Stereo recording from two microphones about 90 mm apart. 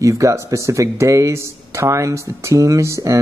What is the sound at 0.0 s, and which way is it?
Speech, 35° right (ahead or behind).